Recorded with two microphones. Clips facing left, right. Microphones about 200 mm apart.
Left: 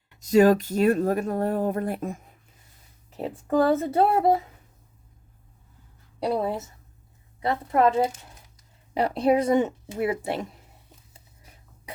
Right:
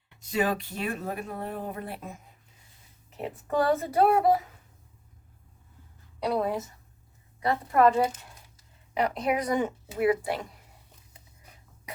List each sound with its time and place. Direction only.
0.2 s speech: 40° left (ahead or behind)
3.2 s speech: 30° left (ahead or behind)
6.1 s a woman's voice: 30° left (ahead or behind)
7.4 s speech: 25° left (ahead or behind)